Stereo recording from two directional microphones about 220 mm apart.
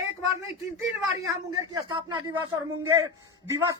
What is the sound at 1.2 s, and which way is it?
A man's voice, 15° right (ahead or behind).